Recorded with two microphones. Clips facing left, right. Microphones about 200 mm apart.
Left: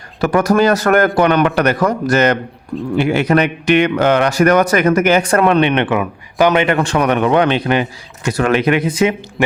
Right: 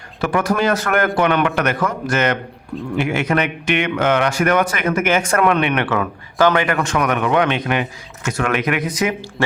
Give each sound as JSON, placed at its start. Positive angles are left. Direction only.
{"t": 0.2, "sound": "a man's voice", "side_deg": 40}